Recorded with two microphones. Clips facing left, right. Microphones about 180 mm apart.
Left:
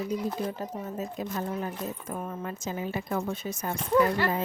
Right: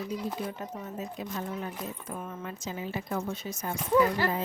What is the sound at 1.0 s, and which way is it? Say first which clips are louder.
Speech: left 3 dB; 45° left (ahead or behind).